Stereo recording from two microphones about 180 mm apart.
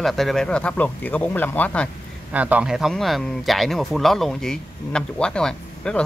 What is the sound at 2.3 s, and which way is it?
Speech, 10° right (ahead or behind).